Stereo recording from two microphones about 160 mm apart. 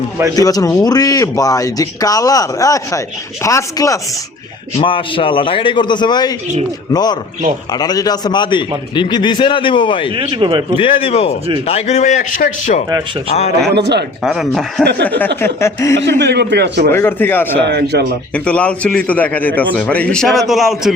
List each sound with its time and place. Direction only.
0.3 s speech: 20° left (ahead or behind)
4.8 s a man's voice: 30° left (ahead or behind)
10.2 s speech: 35° right (ahead or behind)
10.8 s a man's voice: 35° left (ahead or behind)
13.7 s a man's voice: 90° right
14.3 s speech: centre (ahead or behind)
15.4 s a man's voice: 15° left (ahead or behind)
16.2 s a man's voice: 90° right
16.9 s a man's voice: 15° left (ahead or behind)
17.6 s a man's voice: 90° right
18.4 s a man's voice: 10° left (ahead or behind)